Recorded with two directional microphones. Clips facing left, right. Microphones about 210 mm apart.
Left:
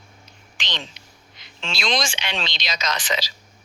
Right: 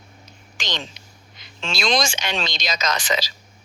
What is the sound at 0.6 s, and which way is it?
Speech, 45° right (ahead or behind).